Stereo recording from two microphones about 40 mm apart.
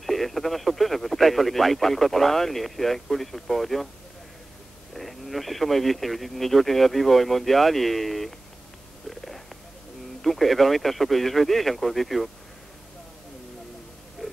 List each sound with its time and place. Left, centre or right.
0.0 s speech: centre
4.9 s speech: centre
10.2 s speech: centre